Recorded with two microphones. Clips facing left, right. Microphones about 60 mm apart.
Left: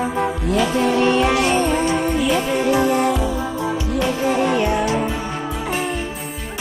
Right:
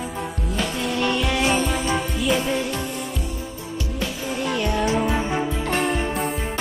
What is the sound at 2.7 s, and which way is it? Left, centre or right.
Music, left.